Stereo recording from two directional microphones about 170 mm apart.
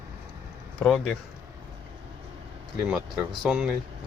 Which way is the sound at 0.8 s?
Centre (ahead or behind).